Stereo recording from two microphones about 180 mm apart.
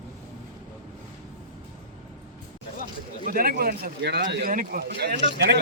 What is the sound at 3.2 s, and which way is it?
A man's voice, 50° right (ahead or behind).